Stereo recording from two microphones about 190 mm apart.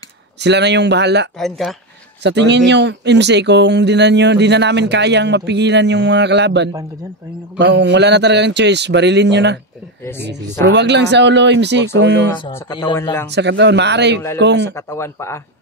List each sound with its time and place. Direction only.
0.4 s speech: 65° right (ahead or behind)
1.4 s speech: centre (ahead or behind)
2.2 s speech: 65° right (ahead or behind)
10.0 s speech: 10° left (ahead or behind)
10.6 s speech: 65° right (ahead or behind)
12.9 s speech: 15° left (ahead or behind)
13.3 s speech: 65° right (ahead or behind)
14.8 s speech: 15° left (ahead or behind)